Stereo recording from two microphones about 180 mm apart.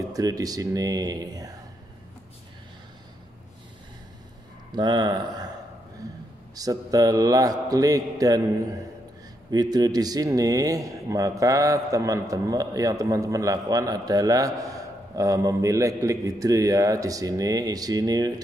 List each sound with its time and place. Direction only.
0.1 s a man's voice: 20° right (ahead or behind)
4.7 s a man's voice: 25° right (ahead or behind)
6.5 s a man's voice: 20° right (ahead or behind)